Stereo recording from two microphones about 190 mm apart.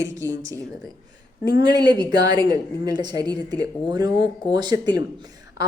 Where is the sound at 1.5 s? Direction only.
55° left (ahead or behind).